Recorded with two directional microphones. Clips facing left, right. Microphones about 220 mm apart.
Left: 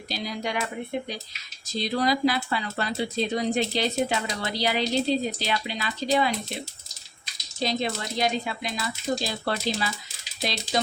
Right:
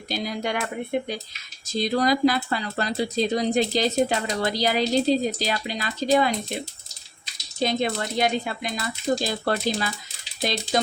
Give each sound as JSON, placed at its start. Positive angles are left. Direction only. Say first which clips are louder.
{"t": 0.1, "sound": "speech", "louder": "right 3 dB", "side_deg": -50}
{"t": 7.6, "sound": "speech", "louder": "right 3 dB", "side_deg": -55}